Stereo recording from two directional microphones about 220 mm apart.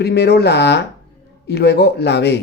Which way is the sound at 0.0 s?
50° left (ahead or behind).